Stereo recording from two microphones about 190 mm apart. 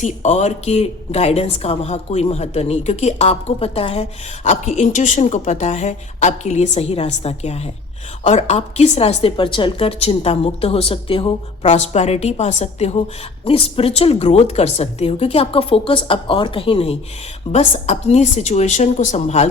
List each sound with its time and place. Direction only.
0.0 s a woman's voice: 40° left (ahead or behind)